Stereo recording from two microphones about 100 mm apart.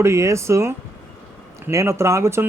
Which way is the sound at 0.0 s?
30° right (ahead or behind).